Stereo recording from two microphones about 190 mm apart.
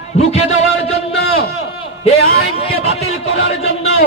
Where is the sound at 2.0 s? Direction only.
30° left (ahead or behind).